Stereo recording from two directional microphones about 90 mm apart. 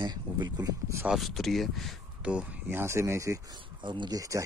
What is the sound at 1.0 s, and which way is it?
Speech, centre (ahead or behind).